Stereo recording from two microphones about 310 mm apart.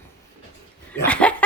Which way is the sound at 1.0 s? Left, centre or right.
Centre.